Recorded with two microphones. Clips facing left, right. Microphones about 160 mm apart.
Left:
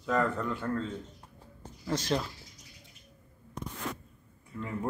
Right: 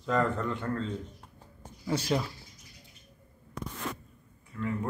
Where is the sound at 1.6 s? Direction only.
10° right (ahead or behind).